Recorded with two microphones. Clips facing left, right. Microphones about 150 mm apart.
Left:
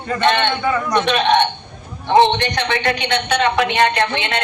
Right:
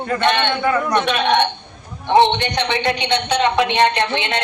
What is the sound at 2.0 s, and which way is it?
A man's voice, 20° right (ahead or behind).